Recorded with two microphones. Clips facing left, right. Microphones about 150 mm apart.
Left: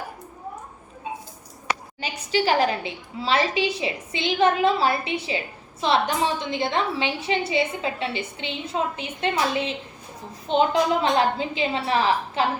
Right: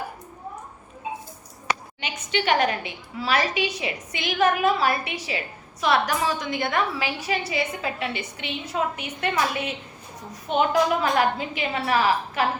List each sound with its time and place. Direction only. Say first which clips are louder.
2.0 s a woman's voice: left 3 dB; 35° left (ahead or behind)